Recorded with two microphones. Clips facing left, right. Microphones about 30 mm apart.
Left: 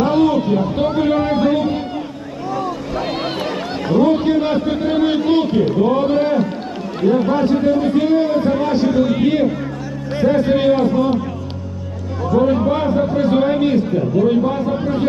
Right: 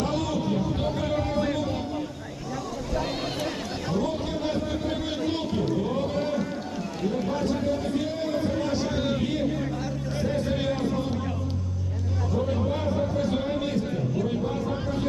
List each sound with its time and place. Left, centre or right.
0.0 s a sound: left
2.5 s vehicle: left
3.8 s a man's voice: left
12.5 s a man's voice: left